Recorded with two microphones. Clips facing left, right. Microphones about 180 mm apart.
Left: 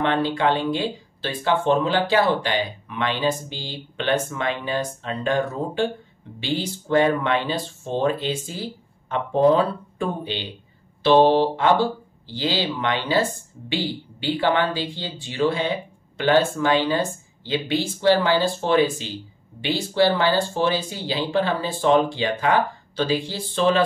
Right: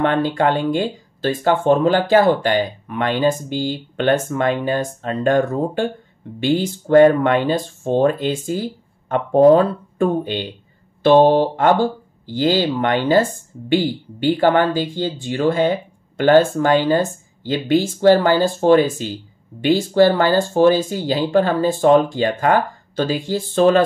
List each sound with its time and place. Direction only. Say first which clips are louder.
0.0 s speech: right 4 dB; 50° right (ahead or behind)